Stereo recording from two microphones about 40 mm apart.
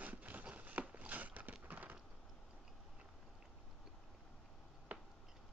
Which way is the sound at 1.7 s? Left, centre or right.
Right.